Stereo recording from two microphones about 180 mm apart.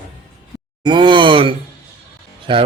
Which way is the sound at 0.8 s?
25° right (ahead or behind).